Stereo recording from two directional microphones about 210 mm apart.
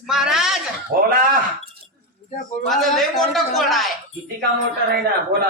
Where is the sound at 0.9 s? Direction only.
40° right (ahead or behind).